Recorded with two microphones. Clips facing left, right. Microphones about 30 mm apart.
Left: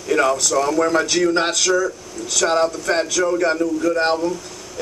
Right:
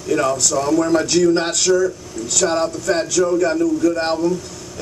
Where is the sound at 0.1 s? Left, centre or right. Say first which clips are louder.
Left 1 dB; left.